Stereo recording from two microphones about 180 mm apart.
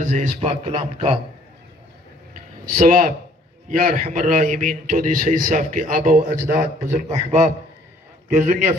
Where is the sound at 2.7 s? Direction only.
45° right (ahead or behind).